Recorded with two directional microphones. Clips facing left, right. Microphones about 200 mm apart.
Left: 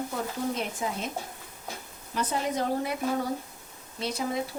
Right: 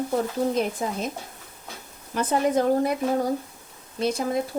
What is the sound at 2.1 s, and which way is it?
Speech, 50° right (ahead or behind).